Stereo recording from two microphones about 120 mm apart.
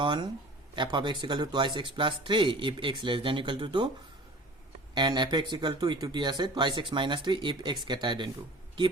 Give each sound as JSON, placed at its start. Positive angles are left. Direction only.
{"t": 0.0, "sound": "speech", "side_deg": -40}
{"t": 4.9, "sound": "speech", "side_deg": -40}